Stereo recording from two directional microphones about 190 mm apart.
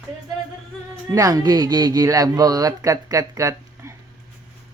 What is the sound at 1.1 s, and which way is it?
Speech, 20° right (ahead or behind).